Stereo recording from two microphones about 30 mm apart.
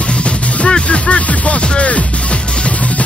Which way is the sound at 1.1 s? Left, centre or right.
Left.